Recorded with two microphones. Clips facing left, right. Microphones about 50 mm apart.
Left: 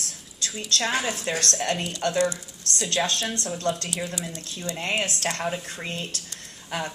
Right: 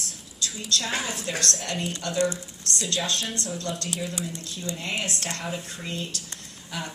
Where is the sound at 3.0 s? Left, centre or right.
Centre.